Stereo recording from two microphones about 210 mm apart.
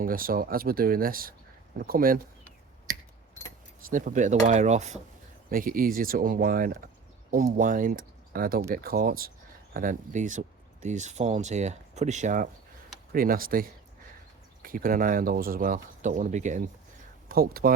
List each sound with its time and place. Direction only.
0.0 s speech: 40° right (ahead or behind)
3.8 s speech: 40° right (ahead or behind)
5.5 s speech: 45° right (ahead or behind)